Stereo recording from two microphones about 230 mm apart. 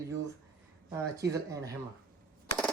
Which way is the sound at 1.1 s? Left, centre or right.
Centre.